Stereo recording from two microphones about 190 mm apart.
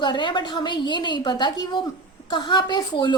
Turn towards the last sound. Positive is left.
turn(degrees=20)  # may be behind; listen again after turning